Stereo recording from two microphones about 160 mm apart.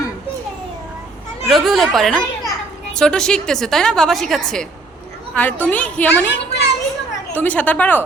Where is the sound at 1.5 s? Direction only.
Centre (ahead or behind).